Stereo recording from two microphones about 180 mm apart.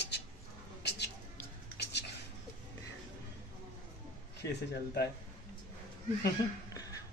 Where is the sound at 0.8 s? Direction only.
70° left (ahead or behind).